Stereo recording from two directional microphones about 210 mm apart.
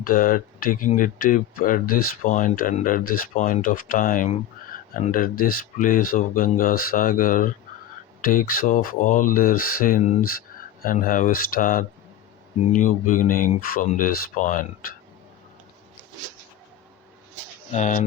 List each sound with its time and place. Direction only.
0.0 s speech: 40° left (ahead or behind)
13.1 s speech: 40° left (ahead or behind)
17.7 s speech: 35° left (ahead or behind)